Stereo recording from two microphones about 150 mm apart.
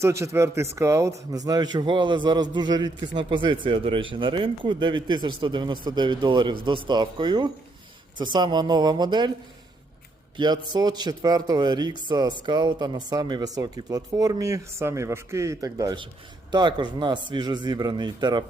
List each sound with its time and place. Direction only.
0.0 s a man's voice: 20° right (ahead or behind)
10.3 s a man's voice: 30° right (ahead or behind)